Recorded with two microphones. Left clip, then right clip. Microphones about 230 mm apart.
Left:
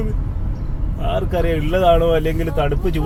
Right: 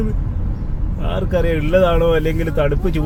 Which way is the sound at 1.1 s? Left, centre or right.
Centre.